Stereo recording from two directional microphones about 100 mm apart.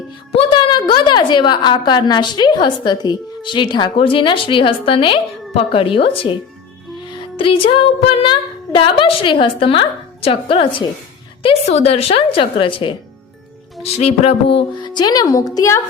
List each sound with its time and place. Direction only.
0.3 s a woman's voice: 55° left (ahead or behind)
7.1 s music: 60° left (ahead or behind)
11.4 s speech: 85° left; by 13.0 s 55° left (ahead or behind)
13.8 s speech: 85° left
14.8 s speech: 45° left (ahead or behind); by 15.8 s 30° left (ahead or behind)